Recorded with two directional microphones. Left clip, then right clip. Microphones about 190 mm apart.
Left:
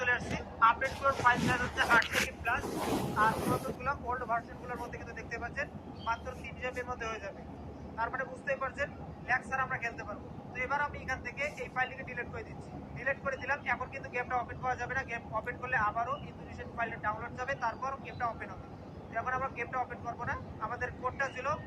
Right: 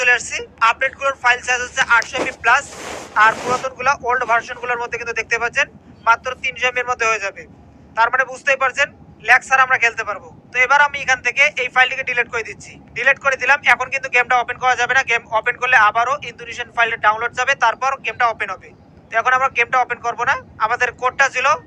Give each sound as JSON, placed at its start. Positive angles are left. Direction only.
{"t": 0.0, "sound": "speech", "side_deg": -50}
{"t": 3.8, "sound": "a man's voice", "side_deg": -50}